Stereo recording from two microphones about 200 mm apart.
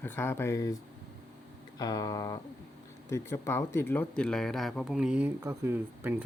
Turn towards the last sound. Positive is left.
turn(degrees=-15)  # may be behind; listen again after turning